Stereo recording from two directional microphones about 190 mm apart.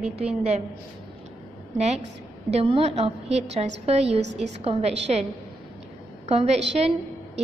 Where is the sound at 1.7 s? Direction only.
35° right (ahead or behind).